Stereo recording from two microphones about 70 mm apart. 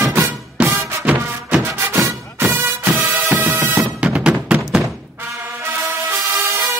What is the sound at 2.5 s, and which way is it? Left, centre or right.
Music, right.